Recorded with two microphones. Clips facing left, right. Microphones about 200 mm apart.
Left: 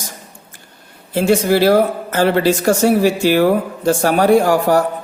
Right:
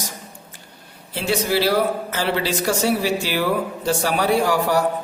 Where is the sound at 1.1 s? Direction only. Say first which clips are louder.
Left 7 dB; 50° left (ahead or behind).